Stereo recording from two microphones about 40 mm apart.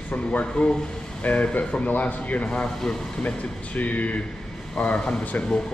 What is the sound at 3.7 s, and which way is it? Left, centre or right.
Speech, left.